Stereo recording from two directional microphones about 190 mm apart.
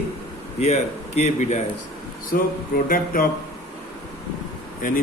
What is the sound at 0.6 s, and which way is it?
A man's voice, 35° left (ahead or behind).